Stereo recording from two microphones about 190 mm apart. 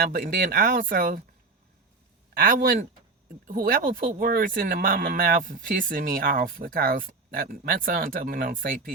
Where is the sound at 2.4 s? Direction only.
45° right (ahead or behind).